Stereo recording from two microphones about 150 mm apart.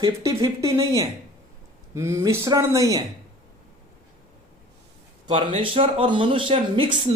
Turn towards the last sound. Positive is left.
turn(degrees=-30)  # may be behind; listen again after turning